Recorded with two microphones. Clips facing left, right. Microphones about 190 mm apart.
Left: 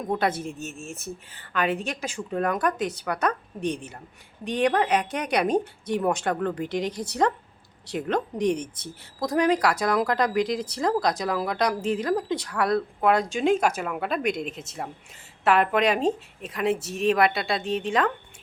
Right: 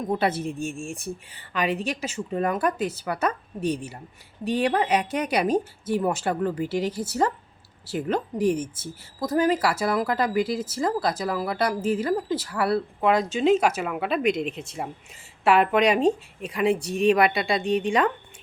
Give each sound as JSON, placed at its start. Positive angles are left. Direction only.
{"t": 0.1, "sound": "speech", "side_deg": -10}
{"t": 14.4, "sound": "speech", "side_deg": 40}
{"t": 15.4, "sound": "speech", "side_deg": 0}